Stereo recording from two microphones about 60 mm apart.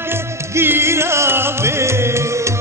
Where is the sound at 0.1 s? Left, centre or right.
Right.